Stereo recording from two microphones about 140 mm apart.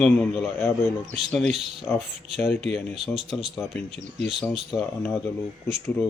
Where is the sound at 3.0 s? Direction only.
Centre (ahead or behind).